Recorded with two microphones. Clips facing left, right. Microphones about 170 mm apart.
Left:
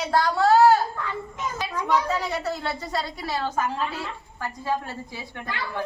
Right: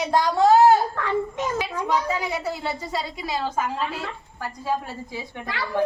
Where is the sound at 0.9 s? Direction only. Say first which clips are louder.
Right 7 dB; 75° right (ahead or behind).